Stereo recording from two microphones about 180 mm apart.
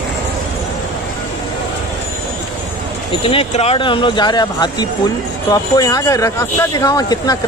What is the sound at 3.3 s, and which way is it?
Speech, 35° left (ahead or behind).